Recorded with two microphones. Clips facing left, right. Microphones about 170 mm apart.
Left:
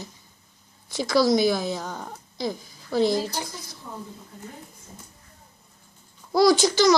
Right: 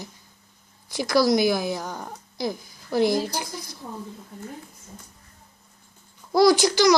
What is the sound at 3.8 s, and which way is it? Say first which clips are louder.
Speech: right 1 dB; 45° right (ahead or behind).